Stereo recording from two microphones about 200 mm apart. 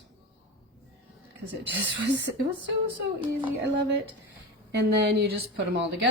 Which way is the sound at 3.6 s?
60° right (ahead or behind).